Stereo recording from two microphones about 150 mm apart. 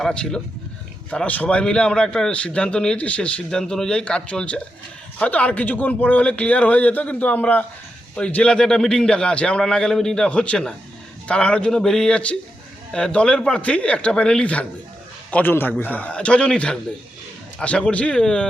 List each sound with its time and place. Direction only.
0.0 s a man's voice: 5° left (ahead or behind)